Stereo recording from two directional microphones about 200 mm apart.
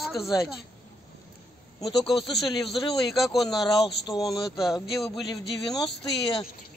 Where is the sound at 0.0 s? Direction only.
Centre (ahead or behind).